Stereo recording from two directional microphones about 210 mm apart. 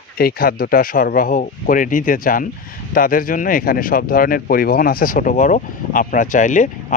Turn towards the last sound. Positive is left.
turn(degrees=35)  # may be behind; listen again after turning